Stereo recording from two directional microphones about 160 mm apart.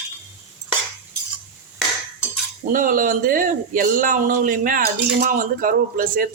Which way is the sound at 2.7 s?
60° right (ahead or behind).